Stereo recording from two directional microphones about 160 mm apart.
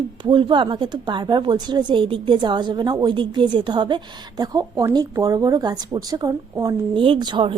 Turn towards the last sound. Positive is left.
turn(degrees=-30)  # may be behind; listen again after turning